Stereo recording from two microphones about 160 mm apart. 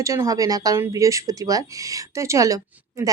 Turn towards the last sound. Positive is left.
turn(degrees=-20)  # may be behind; listen again after turning